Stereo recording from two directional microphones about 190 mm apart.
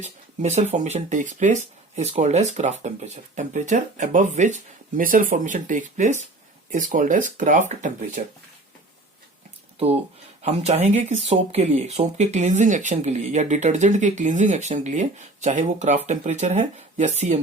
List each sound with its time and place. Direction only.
0.0 s speech: 35° right (ahead or behind)
9.7 s speech: 30° right (ahead or behind)